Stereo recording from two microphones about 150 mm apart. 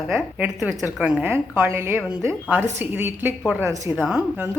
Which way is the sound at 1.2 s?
15° right (ahead or behind).